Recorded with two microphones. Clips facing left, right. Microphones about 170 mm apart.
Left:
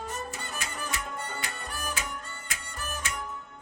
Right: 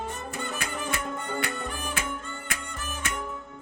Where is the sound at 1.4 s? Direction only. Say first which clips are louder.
Right 4 dB; 60° right (ahead or behind).